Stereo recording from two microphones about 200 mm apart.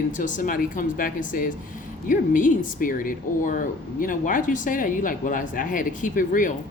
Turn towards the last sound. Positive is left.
turn(degrees=40)  # may be behind; listen again after turning